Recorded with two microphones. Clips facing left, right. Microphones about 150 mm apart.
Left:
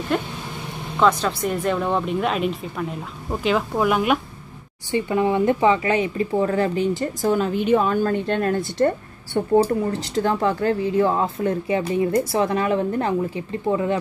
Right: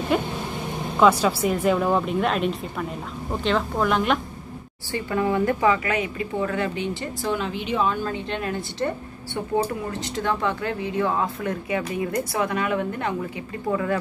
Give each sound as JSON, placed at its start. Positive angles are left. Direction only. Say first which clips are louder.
{"t": 0.1, "sound": "speech", "louder": "even", "side_deg": -5}
{"t": 4.9, "sound": "a woman's voice", "louder": "left 3 dB", "side_deg": 20}
{"t": 9.6, "sound": "a woman's voice", "louder": "left 4 dB", "side_deg": 35}